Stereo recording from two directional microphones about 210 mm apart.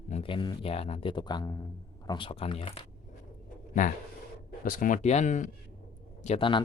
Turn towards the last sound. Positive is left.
turn(degrees=25)  # may be behind; listen again after turning